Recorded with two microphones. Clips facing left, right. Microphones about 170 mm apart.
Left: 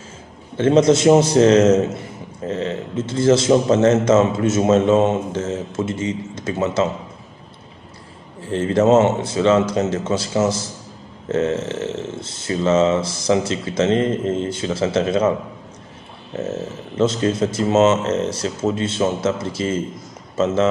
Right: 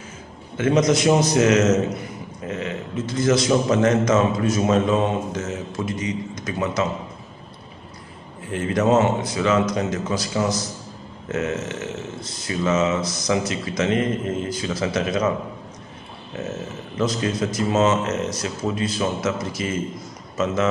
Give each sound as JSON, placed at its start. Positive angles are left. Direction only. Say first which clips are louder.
{"t": 0.6, "sound": "a man's voice", "louder": "left 5 dB", "side_deg": 30}
{"t": 8.4, "sound": "a man's voice", "louder": "left 5 dB", "side_deg": 30}
{"t": 16.3, "sound": "a man's voice", "louder": "left 5 dB", "side_deg": 25}